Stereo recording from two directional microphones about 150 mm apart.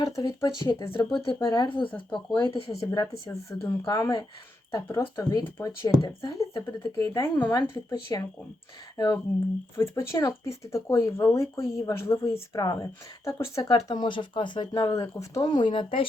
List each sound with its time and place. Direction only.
0.0 s speech: 25° left (ahead or behind)
1.9 s speech: 10° left (ahead or behind)
2.3 s speech: 30° left (ahead or behind)